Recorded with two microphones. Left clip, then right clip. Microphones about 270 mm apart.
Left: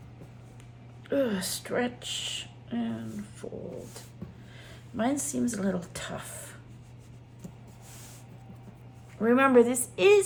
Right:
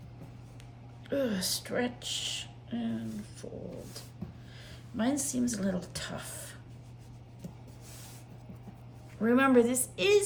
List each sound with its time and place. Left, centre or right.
1.1 s speech: centre
4.9 s speech: centre
9.2 s speech: centre